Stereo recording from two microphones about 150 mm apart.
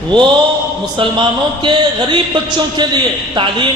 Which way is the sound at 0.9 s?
30° right (ahead or behind).